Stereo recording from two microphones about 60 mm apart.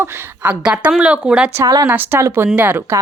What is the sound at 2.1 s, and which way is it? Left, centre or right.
Speech, right.